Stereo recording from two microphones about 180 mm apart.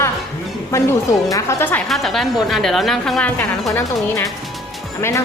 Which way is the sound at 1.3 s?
15° left (ahead or behind).